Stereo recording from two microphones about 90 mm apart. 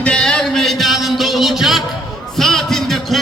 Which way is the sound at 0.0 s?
10° left (ahead or behind).